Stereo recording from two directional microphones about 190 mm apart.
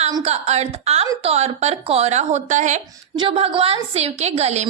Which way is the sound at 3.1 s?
30° right (ahead or behind).